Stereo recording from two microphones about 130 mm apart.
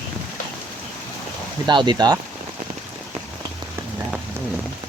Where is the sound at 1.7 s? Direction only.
35° right (ahead or behind).